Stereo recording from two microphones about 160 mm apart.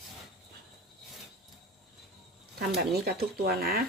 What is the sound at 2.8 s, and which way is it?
Speech, 80° right.